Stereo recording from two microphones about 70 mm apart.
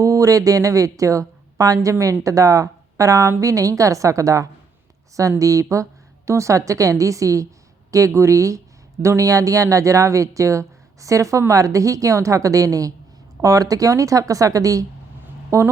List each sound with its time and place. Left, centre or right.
0.0 s speech: right